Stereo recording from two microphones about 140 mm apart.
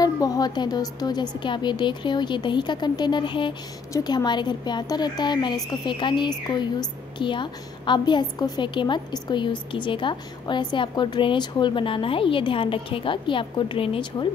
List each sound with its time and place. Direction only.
0.0 s a woman's voice: 25° left (ahead or behind)